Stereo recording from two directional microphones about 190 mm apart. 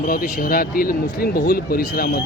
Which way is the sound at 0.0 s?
45° left (ahead or behind).